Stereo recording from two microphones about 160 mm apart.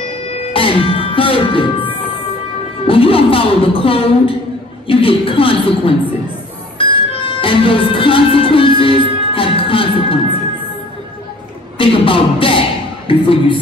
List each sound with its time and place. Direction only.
0.3 s music: 35° left (ahead or behind)
2.9 s a woman's voice: 35° left (ahead or behind)
6.8 s music: 35° left (ahead or behind)
11.8 s a man's voice: 35° left (ahead or behind)